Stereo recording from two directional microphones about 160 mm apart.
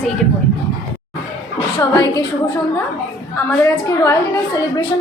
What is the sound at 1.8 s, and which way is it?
Speech, 20° left (ahead or behind).